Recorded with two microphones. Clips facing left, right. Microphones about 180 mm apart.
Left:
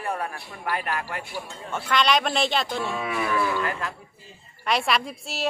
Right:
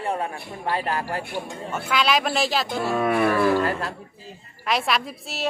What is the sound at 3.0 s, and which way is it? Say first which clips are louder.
Wild animals: right 8 dB; 55° right (ahead or behind).